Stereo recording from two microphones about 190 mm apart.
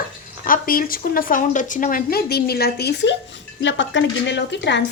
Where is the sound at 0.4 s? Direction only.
45° left (ahead or behind).